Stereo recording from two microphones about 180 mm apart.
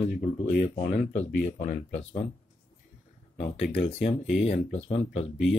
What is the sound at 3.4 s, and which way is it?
Speech, 60° left (ahead or behind).